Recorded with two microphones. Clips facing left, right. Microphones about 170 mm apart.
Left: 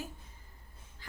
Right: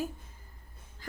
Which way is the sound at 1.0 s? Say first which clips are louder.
Right 7 dB; 45° right (ahead or behind).